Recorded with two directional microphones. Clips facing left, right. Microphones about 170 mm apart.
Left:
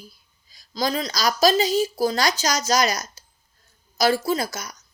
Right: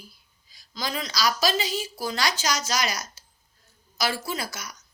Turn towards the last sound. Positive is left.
turn(degrees=40)  # may be behind; listen again after turning